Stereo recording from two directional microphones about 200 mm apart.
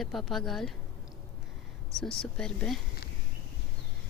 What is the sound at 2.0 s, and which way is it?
Speech, 5° left (ahead or behind).